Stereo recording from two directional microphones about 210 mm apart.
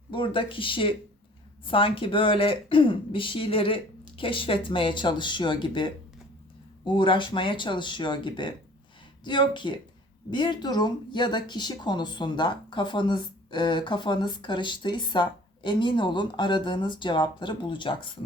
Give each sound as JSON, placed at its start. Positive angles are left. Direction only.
{"t": 0.1, "sound": "speech", "side_deg": 25}